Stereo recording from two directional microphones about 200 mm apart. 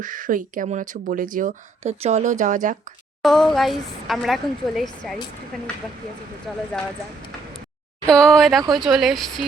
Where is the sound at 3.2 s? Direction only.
Centre (ahead or behind).